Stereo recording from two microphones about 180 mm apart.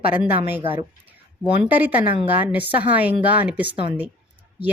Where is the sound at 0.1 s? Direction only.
10° right (ahead or behind).